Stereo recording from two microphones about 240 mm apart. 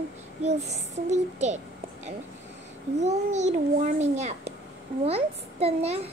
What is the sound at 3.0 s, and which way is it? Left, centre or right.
A woman's voice, right.